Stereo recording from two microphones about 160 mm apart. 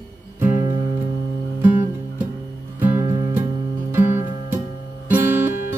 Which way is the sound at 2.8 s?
10° right (ahead or behind).